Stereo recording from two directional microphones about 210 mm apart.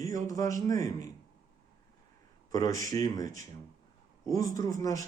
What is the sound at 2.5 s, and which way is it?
Speech, 15° left (ahead or behind).